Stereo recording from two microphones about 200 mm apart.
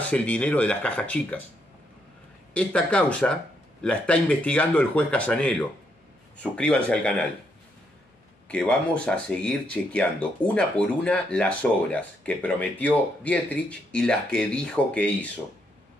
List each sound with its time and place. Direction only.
0.0 s speech: 5° left (ahead or behind)
2.5 s speech: 5° left (ahead or behind)
8.5 s speech: 5° left (ahead or behind)